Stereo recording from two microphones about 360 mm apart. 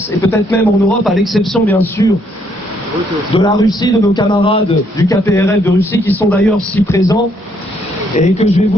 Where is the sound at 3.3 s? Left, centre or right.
Centre.